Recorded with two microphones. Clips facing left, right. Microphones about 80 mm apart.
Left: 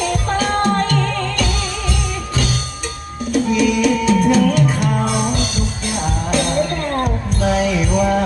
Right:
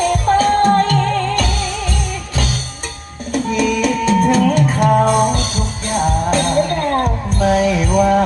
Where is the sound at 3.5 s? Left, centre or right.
Right.